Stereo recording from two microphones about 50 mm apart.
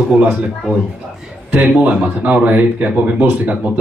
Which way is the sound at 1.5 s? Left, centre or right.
Right.